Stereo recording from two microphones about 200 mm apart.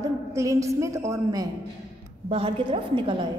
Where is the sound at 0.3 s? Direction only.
15° right (ahead or behind).